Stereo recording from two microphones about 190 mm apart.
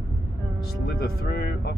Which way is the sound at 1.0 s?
50° left (ahead or behind).